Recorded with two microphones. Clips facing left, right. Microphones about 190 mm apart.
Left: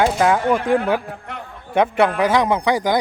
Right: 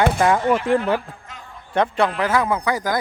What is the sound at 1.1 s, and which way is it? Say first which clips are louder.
Speech: left 8 dB; 65° left (ahead or behind).